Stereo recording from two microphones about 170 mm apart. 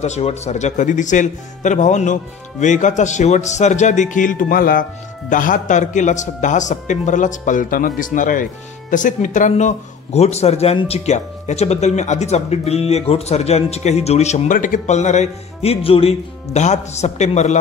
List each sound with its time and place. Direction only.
0.0 s a man's voice: 40° left (ahead or behind)